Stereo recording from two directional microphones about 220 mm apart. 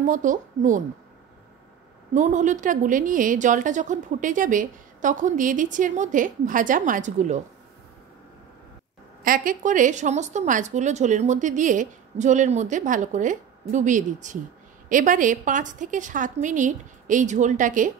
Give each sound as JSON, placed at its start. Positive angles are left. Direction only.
{"t": 0.0, "sound": "a woman's voice", "side_deg": -35}
{"t": 2.1, "sound": "a woman's voice", "side_deg": -35}
{"t": 9.2, "sound": "a woman's voice", "side_deg": -40}